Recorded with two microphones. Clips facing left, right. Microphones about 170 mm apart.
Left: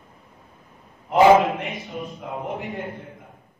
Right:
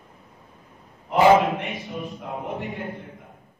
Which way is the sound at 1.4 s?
Centre (ahead or behind).